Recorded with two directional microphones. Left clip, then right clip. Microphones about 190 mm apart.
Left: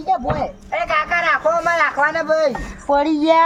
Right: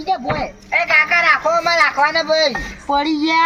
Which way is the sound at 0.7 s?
20° left (ahead or behind).